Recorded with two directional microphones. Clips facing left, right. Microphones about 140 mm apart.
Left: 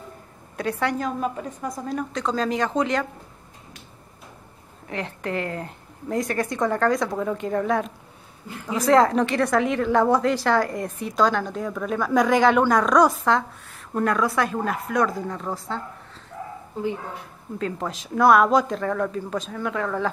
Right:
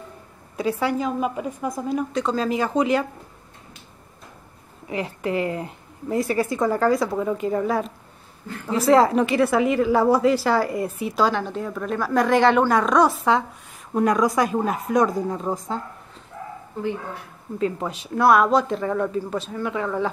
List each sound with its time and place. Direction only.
0.6 s a woman's voice: 5° right (ahead or behind)
4.8 s a woman's voice: 10° right (ahead or behind)
13.9 s a woman's voice: 15° right (ahead or behind)
17.6 s a woman's voice: 5° right (ahead or behind)